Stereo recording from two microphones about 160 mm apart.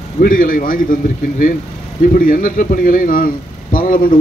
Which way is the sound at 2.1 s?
60° left (ahead or behind).